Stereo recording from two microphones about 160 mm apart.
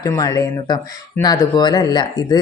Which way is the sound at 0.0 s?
20° left (ahead or behind).